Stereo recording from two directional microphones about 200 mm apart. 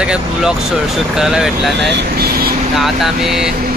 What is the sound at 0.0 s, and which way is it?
Speech, 5° right (ahead or behind).